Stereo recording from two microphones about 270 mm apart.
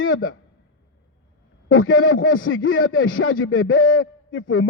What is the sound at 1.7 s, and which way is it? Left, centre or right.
A man's voice, left.